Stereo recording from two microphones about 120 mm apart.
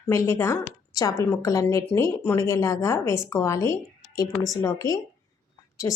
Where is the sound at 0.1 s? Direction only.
20° left (ahead or behind).